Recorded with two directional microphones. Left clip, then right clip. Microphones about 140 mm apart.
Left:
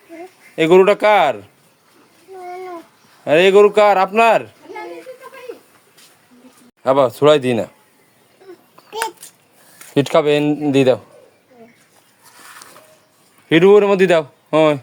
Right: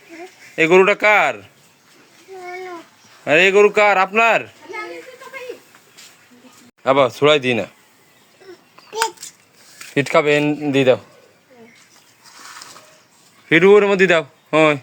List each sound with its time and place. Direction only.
0.5 s speech: 25° left (ahead or behind)
3.2 s speech: 25° left (ahead or behind)
6.8 s speech: 35° left (ahead or behind)
9.9 s speech: 30° left (ahead or behind)
13.5 s speech: 25° left (ahead or behind)